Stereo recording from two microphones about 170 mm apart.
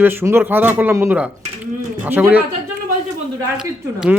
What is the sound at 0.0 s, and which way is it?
Speech, 10° right (ahead or behind).